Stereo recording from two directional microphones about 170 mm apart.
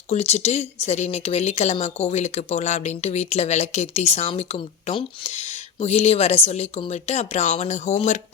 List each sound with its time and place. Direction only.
0.1 s speech: 40° left (ahead or behind)